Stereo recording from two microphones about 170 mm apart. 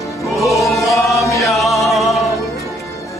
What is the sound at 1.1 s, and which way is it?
Chant, 20° left (ahead or behind).